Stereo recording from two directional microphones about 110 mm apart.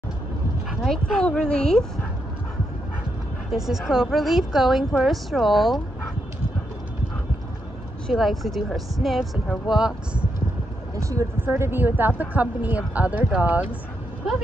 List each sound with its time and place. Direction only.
0.7 s a woman's voice: centre (ahead or behind)
3.5 s a woman's voice: 5° right (ahead or behind)
8.1 s a woman's voice: centre (ahead or behind)
11.0 s a woman's voice: 30° right (ahead or behind); by 13.7 s 15° right (ahead or behind)